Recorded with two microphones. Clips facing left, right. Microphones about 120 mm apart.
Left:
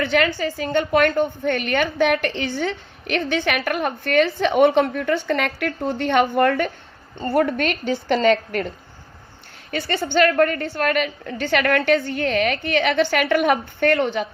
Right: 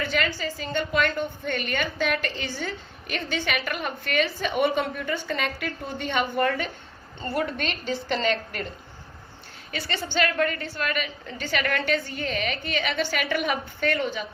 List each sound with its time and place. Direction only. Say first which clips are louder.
0.0 s a woman's voice: left 7 dB; 60° left (ahead or behind)
9.7 s a woman's voice: left 8 dB; 45° left (ahead or behind); by 14.3 s 70° left (ahead or behind)